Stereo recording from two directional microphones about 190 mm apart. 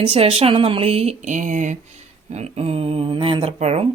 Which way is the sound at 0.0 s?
30° right (ahead or behind).